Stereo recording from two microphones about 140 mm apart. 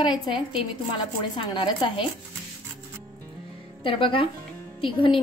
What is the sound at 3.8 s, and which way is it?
A woman's voice, 40° left (ahead or behind).